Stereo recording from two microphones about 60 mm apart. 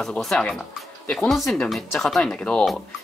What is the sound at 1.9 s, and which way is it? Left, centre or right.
Speech, centre.